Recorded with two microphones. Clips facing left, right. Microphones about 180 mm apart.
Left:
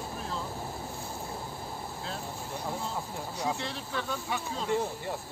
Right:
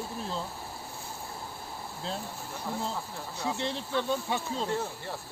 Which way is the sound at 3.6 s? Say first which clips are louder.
Right 4 dB; 25° right (ahead or behind).